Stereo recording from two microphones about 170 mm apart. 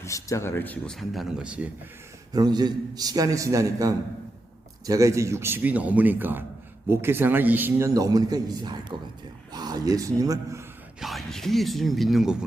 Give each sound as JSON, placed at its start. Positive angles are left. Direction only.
{"t": 0.0, "sound": "speech", "side_deg": 15}
{"t": 2.3, "sound": "a man's voice", "side_deg": -25}
{"t": 11.0, "sound": "speech", "side_deg": 0}